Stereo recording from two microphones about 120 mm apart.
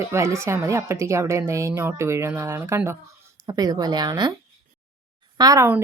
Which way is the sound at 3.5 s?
30° right (ahead or behind).